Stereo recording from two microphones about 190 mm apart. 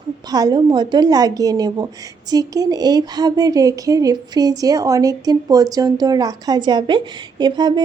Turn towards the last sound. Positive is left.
turn(degrees=-20)  # may be behind; listen again after turning